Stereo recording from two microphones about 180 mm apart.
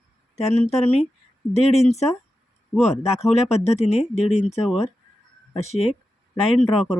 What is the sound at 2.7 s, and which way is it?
Speech, centre (ahead or behind).